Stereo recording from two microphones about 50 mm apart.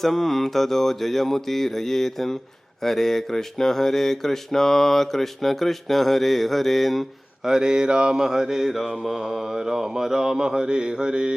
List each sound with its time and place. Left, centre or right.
0.0 s mantra: centre
7.4 s mantra: centre